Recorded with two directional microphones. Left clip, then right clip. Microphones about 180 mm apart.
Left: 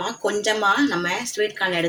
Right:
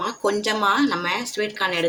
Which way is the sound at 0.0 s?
60° right (ahead or behind).